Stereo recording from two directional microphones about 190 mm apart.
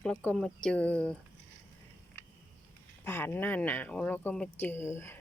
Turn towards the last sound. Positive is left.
turn(degrees=15)  # may be behind; listen again after turning